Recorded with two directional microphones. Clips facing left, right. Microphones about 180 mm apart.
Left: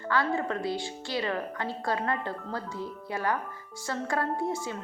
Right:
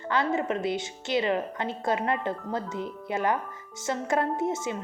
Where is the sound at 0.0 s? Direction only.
20° right (ahead or behind).